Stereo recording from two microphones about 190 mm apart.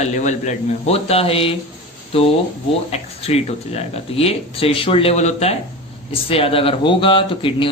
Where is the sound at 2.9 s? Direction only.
35° left (ahead or behind).